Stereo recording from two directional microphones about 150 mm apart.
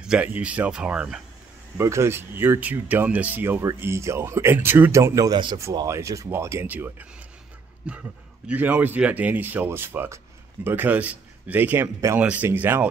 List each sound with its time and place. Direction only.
0.0 s a man's voice: 5° right (ahead or behind)
1.8 s a man's voice: 20° right (ahead or behind)
5.6 s a man's voice: 20° right (ahead or behind)